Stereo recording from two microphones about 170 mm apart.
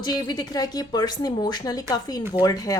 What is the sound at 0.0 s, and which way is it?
Speech, 25° left (ahead or behind).